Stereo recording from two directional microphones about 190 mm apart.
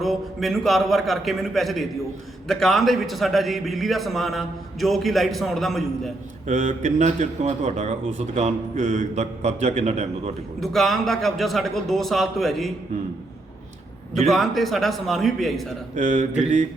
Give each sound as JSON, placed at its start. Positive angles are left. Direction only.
{"t": 0.0, "sound": "a man's voice", "side_deg": 0}
{"t": 6.5, "sound": "speech", "side_deg": -40}
{"t": 10.6, "sound": "a man's voice", "side_deg": 0}
{"t": 14.3, "sound": "a man's voice", "side_deg": 0}
{"t": 16.0, "sound": "speech", "side_deg": -40}